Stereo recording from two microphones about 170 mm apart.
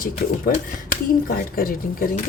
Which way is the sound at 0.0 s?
55° left (ahead or behind).